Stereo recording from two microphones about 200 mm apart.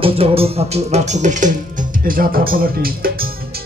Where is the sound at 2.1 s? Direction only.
45° right (ahead or behind).